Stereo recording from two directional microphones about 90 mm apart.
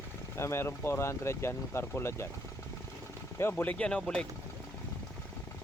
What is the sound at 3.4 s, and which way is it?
Speech, 25° left (ahead or behind).